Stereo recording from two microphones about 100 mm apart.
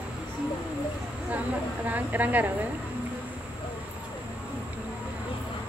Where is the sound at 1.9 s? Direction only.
15° right (ahead or behind).